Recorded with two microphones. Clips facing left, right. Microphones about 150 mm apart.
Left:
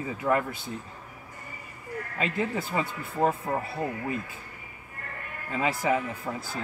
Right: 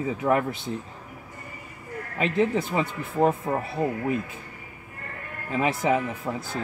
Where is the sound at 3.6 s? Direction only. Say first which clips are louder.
Right 4 dB; 20° right (ahead or behind).